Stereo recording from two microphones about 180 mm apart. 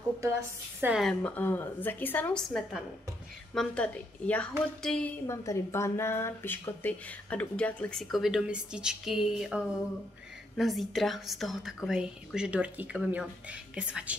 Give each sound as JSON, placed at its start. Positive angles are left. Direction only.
{"t": 0.7, "sound": "a woman's voice", "side_deg": -10}
{"t": 1.0, "sound": "speech", "side_deg": 10}
{"t": 5.2, "sound": "speech", "side_deg": 15}